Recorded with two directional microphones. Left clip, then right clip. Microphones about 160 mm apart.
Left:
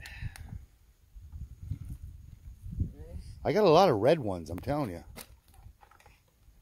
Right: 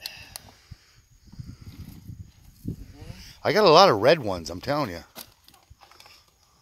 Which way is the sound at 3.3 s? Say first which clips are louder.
Right 6 dB; 10° left (ahead or behind).